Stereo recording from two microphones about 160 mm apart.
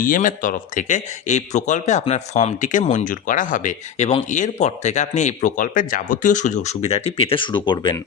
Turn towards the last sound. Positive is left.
turn(degrees=30)  # may be behind; listen again after turning